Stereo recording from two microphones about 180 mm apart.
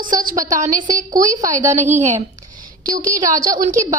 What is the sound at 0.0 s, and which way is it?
Speech, 50° right (ahead or behind).